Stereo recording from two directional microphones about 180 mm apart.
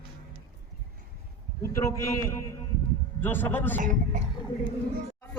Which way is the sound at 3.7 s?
45° right (ahead or behind).